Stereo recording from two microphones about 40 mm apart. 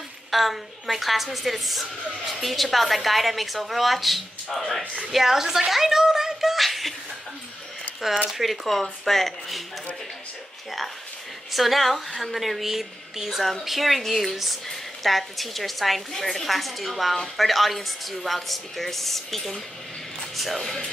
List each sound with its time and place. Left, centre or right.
0.3 s a woman's voice: centre
5.1 s a sound: centre
8.3 s a woman's voice: centre
11.5 s a woman's voice: centre